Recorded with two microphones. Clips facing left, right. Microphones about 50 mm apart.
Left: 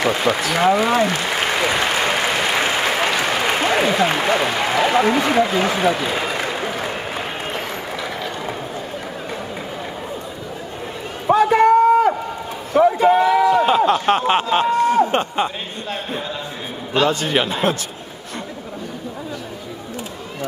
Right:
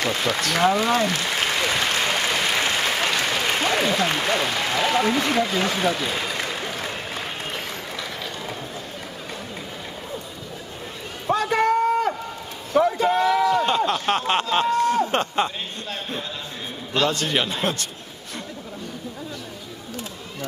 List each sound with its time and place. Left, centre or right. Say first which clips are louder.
0.0 s a man's voice: left 5 dB; centre
0.7 s applause: left 5 dB; centre
11.3 s run: left 8 dB; centre
12.7 s a sound: left 5 dB; centre
16.9 s a man's voice: left 4 dB; centre